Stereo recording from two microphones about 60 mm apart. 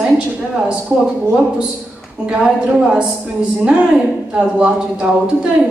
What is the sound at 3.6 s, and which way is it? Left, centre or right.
A woman's voice, centre.